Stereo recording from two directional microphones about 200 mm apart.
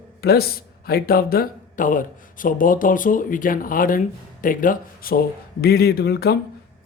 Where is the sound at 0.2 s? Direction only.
50° left (ahead or behind).